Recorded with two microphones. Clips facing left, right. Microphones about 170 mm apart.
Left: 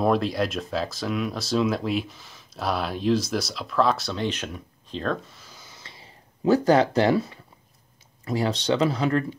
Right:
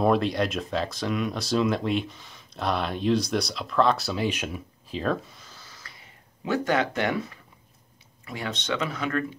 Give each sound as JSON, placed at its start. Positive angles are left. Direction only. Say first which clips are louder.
{"t": 0.0, "sound": "speech", "louder": "even", "side_deg": 0}
{"t": 5.4, "sound": "a sound", "louder": "left 1 dB", "side_deg": 15}
{"t": 8.3, "sound": "speech", "louder": "left 7 dB", "side_deg": 35}